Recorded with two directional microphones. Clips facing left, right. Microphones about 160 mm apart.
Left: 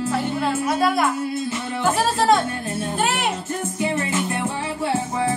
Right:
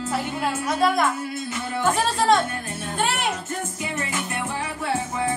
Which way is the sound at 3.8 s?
30° left (ahead or behind).